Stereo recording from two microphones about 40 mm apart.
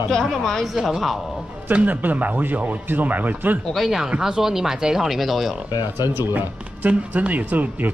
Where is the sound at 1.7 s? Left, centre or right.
Right.